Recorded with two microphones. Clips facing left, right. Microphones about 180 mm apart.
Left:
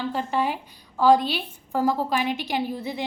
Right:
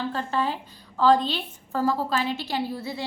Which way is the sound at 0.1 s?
15° left (ahead or behind).